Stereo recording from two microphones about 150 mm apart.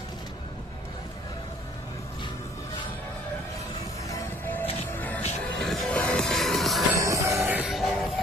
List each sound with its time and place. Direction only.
4.9 s music: 10° left (ahead or behind)
6.9 s music: 20° right (ahead or behind)
7.4 s music: 10° right (ahead or behind)